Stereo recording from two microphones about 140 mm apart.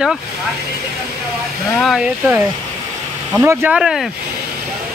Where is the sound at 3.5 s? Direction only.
10° right (ahead or behind).